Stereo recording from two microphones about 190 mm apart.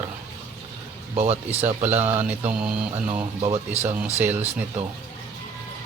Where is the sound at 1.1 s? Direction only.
35° right (ahead or behind).